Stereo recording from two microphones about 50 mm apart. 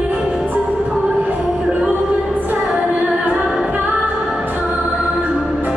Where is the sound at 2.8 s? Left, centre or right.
Right.